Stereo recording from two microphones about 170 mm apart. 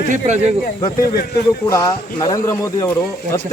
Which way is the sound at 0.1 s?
45° right (ahead or behind).